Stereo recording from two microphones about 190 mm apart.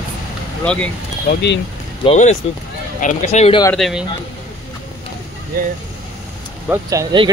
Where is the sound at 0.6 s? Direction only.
5° left (ahead or behind).